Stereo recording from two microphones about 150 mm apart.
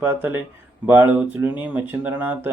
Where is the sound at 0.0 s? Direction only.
15° right (ahead or behind).